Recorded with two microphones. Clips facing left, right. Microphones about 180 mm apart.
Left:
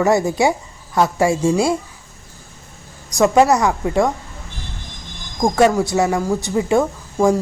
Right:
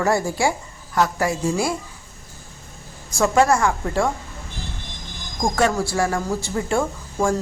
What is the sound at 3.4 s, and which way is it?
Speech, 20° left (ahead or behind).